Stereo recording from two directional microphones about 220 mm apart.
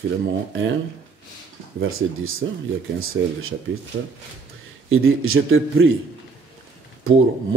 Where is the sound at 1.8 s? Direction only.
70° right (ahead or behind).